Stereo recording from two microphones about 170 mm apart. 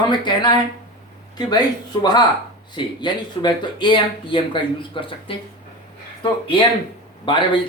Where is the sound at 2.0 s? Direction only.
25° left (ahead or behind).